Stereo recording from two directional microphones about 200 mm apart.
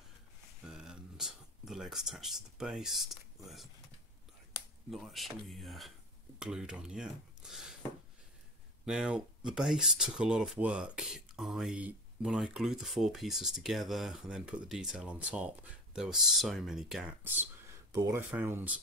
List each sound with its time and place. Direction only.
0.7 s a sound: 5° right (ahead or behind)
4.9 s speech: centre (ahead or behind)
8.8 s speech: 5° right (ahead or behind)